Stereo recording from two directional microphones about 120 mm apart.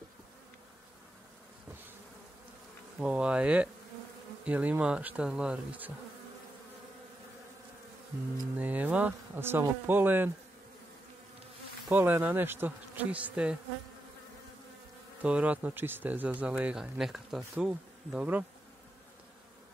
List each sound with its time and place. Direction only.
3.0 s speech: 10° right (ahead or behind)
8.5 s speech: 15° right (ahead or behind)
11.9 s speech: 15° right (ahead or behind)
15.2 s speech: 10° right (ahead or behind)